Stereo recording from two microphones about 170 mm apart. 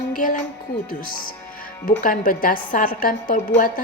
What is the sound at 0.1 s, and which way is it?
Music, 55° left (ahead or behind).